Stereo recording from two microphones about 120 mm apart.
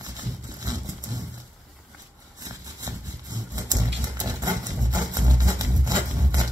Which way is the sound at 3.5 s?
30° right (ahead or behind).